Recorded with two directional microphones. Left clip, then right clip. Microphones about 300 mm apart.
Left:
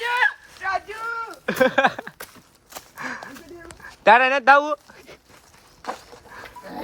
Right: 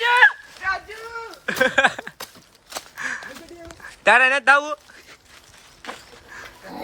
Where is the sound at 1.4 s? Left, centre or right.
Centre.